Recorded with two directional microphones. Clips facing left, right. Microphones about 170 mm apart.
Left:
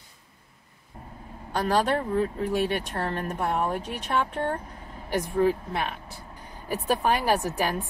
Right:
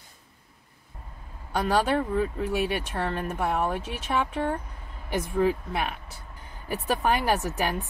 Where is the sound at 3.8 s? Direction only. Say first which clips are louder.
Left 1 dB; 35° left (ahead or behind).